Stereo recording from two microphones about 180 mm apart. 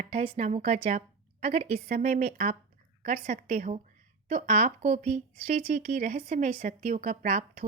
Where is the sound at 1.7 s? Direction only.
50° right (ahead or behind).